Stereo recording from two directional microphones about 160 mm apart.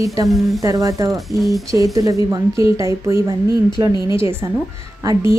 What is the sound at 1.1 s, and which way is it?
Speech, centre (ahead or behind).